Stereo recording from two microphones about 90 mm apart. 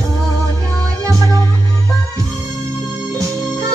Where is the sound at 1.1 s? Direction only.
40° right (ahead or behind).